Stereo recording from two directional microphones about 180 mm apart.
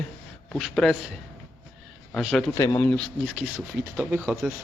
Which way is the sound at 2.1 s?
Centre (ahead or behind).